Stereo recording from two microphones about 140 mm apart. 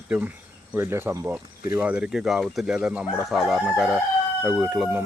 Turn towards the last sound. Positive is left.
turn(degrees=-10)  # may be behind; listen again after turning